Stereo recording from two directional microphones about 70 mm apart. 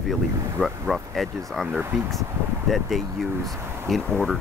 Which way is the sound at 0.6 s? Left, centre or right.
Centre.